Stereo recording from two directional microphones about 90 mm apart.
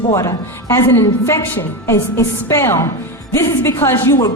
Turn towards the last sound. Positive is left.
turn(degrees=30)  # may be behind; listen again after turning